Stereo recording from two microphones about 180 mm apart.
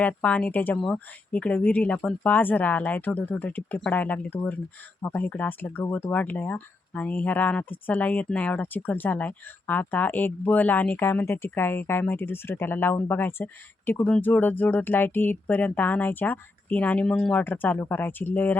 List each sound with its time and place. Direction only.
0.0 s speech: 5° left (ahead or behind)